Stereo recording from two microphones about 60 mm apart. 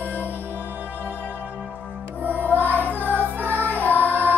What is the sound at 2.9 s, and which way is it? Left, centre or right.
Music, right.